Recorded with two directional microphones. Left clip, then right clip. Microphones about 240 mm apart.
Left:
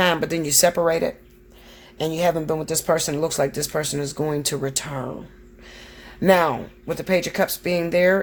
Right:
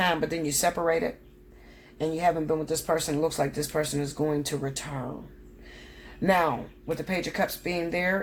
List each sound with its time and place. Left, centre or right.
0.0 s speech: left
6.2 s speech: left